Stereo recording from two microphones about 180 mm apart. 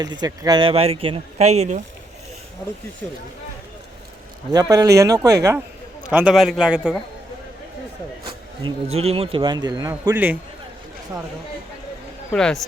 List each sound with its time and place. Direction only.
0.0 s speech: 20° right (ahead or behind); by 1.8 s 40° right (ahead or behind)
4.5 s speech: 20° right (ahead or behind)
6.1 s a man's voice: 5° right (ahead or behind)
8.6 s speech: 35° right (ahead or behind)
9.9 s a man's voice: 10° right (ahead or behind)
12.3 s a man's voice: 5° left (ahead or behind)